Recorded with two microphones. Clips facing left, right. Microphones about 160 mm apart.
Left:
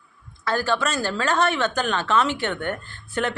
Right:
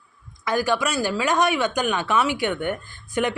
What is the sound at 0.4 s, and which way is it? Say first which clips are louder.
Speech: right 1 dB; 15° right (ahead or behind).